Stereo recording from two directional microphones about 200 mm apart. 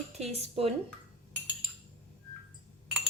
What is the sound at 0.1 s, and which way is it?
Speech, 30° right (ahead or behind).